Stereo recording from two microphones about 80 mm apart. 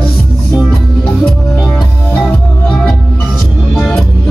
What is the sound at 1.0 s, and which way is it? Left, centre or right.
Music, centre.